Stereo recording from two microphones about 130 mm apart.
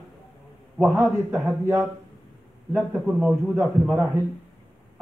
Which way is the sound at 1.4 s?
20° right (ahead or behind).